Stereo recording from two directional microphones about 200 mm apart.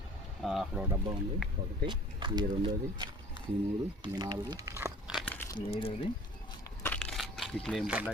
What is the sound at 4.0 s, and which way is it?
Speech, 20° right (ahead or behind).